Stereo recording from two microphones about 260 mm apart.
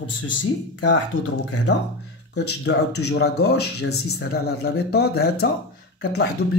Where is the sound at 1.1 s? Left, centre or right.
Left.